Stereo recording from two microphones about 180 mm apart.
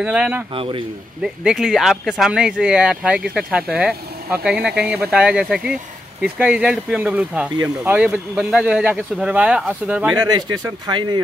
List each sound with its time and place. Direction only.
0.0 s speech: 5° right (ahead or behind)
0.6 s speech: 30° right (ahead or behind)
1.2 s speech: 5° right (ahead or behind)
10.1 s speech: 20° right (ahead or behind)